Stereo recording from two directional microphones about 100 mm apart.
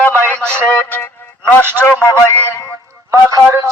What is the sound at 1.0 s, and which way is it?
Music, 20° left (ahead or behind).